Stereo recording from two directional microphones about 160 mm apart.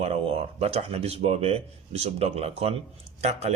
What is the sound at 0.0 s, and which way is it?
Speech, 40° right (ahead or behind).